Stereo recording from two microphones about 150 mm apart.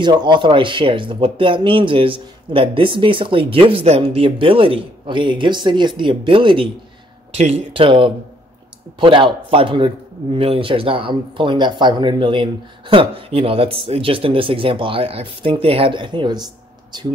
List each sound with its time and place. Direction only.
0.0 s a man's voice: 30° right (ahead or behind)
7.3 s a man's voice: 45° right (ahead or behind); by 16.4 s 30° right (ahead or behind)